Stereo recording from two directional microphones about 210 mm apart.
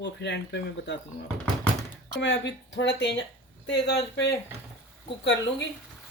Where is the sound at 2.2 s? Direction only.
55° left (ahead or behind).